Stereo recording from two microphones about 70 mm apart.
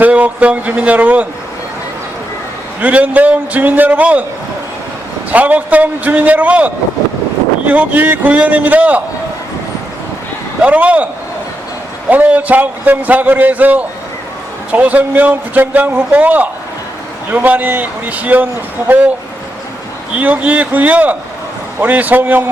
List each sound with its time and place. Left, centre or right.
0.0 s a man's voice: right
2.8 s a man's voice: right
5.3 s a man's voice: right
7.7 s a man's voice: right
10.6 s a man's voice: centre
20.1 s a man's voice: right